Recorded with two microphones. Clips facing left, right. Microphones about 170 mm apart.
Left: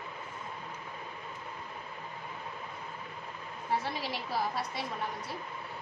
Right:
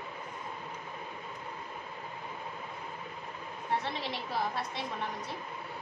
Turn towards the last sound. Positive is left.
turn(degrees=5)  # may be behind; listen again after turning